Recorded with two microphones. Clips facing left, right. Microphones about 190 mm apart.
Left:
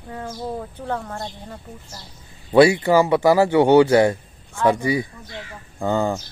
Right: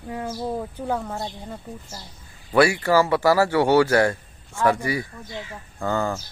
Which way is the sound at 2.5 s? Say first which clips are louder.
Left 4 dB; 20° left (ahead or behind).